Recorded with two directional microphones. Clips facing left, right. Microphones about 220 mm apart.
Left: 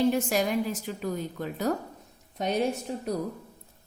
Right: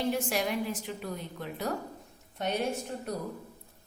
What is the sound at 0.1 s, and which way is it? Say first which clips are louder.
A woman's voice: left 4 dB; 40° left (ahead or behind).